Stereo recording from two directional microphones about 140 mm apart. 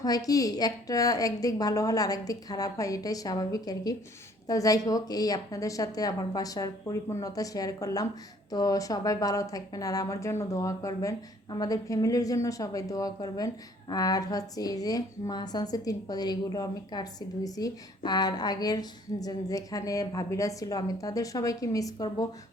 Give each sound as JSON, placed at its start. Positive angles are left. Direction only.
{"t": 0.0, "sound": "a woman's voice", "side_deg": 25}